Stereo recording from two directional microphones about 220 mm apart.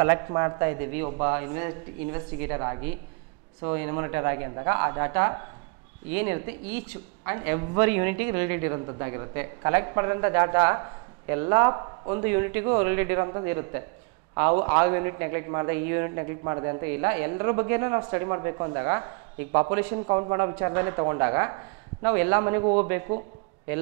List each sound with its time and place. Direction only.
0.0 s a man's voice: 15° right (ahead or behind)